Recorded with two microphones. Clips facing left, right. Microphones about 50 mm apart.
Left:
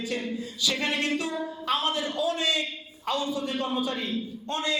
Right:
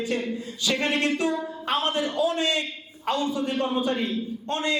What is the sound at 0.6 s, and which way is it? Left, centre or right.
A man's voice, right.